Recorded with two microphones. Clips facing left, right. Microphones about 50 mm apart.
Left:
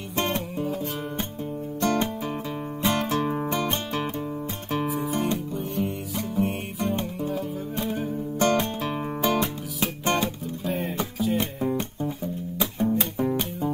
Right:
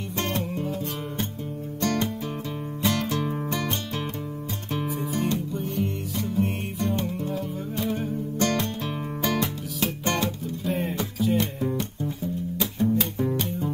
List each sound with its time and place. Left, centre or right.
0.6 s music: centre
1.8 s music: left
4.8 s music: centre
8.4 s music: left
10.6 s music: centre
11.3 s music: centre